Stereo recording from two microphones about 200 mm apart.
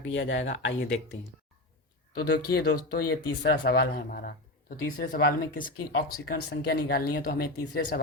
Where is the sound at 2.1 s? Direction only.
50° left (ahead or behind).